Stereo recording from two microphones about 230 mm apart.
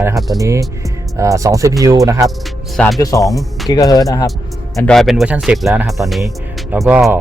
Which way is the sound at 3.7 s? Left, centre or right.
Centre.